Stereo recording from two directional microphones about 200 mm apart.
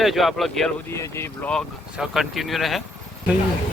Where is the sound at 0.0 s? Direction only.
Centre (ahead or behind).